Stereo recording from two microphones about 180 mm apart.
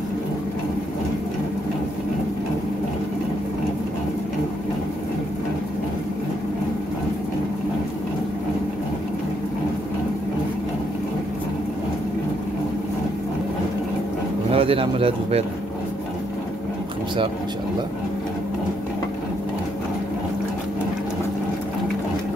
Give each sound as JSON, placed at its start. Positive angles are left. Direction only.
{"t": 14.5, "sound": "speech", "side_deg": -30}